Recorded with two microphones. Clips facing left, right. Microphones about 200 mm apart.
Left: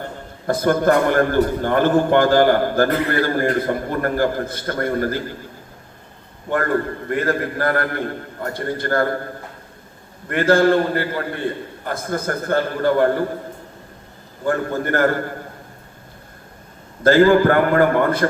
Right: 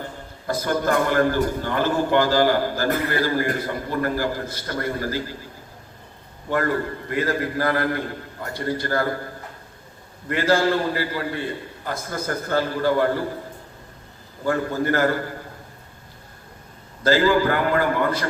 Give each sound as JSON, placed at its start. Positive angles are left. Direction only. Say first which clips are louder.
{"t": 0.4, "sound": "a man's voice", "louder": "left 6 dB", "side_deg": 55}
{"t": 7.1, "sound": "a man's voice", "louder": "left 3 dB", "side_deg": 55}
{"t": 10.2, "sound": "a man's voice", "louder": "left 5 dB", "side_deg": 55}
{"t": 14.4, "sound": "a man's voice", "louder": "left 1 dB", "side_deg": 55}
{"t": 17.0, "sound": "a man's voice", "louder": "left 6 dB", "side_deg": 55}